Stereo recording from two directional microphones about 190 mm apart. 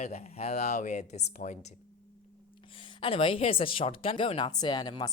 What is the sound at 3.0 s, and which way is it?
Speech, 30° left (ahead or behind).